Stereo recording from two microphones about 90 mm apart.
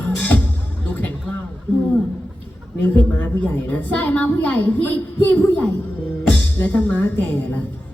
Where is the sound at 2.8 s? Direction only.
20° left (ahead or behind).